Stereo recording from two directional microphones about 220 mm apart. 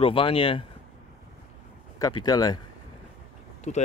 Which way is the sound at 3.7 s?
30° left (ahead or behind).